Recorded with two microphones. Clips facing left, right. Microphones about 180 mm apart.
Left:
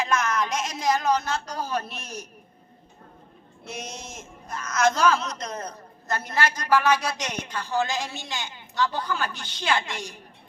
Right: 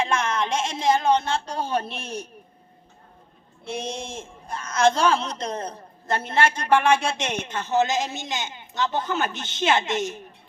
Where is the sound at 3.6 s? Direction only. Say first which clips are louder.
Right 6 dB; 30° right (ahead or behind).